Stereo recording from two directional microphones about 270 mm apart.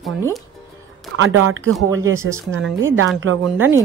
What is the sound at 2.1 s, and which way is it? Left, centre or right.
Speech, centre.